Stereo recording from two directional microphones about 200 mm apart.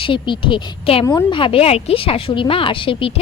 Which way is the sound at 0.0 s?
25° left (ahead or behind).